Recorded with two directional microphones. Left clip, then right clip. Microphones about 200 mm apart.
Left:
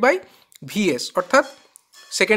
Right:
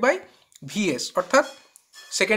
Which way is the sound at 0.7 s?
40° left (ahead or behind).